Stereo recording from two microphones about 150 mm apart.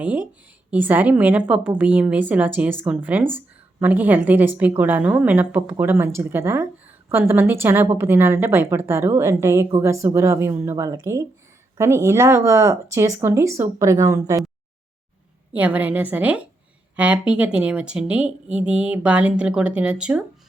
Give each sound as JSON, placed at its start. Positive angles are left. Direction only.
{"t": 0.0, "sound": "a woman's voice", "side_deg": -10}
{"t": 15.5, "sound": "a woman's voice", "side_deg": -10}